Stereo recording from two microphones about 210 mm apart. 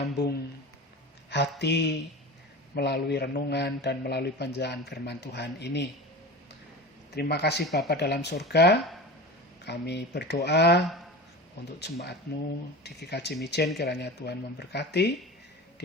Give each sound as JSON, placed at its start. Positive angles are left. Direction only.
{"t": 0.1, "sound": "a man's voice", "side_deg": 50}
{"t": 7.1, "sound": "a man's voice", "side_deg": 50}